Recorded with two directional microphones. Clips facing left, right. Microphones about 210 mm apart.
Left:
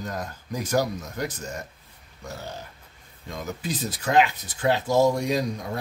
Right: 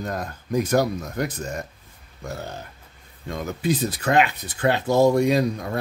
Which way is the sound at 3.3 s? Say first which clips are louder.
Right 7 dB; 60° right (ahead or behind).